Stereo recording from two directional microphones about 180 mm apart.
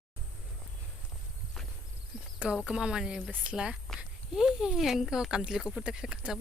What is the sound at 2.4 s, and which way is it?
Speech, 5° right (ahead or behind).